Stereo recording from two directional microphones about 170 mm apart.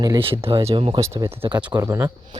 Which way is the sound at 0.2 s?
35° right (ahead or behind).